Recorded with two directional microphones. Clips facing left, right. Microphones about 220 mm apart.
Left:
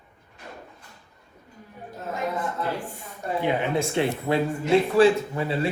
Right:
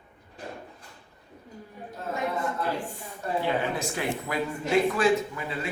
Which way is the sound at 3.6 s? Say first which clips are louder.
Left 6 dB; 25° left (ahead or behind).